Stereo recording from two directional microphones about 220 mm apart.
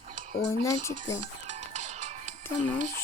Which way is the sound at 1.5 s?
30° right (ahead or behind).